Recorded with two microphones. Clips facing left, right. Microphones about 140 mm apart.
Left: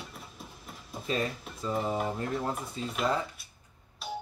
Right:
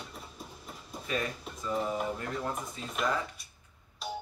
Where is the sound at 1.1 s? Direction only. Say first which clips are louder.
Left 3 dB; 30° left (ahead or behind).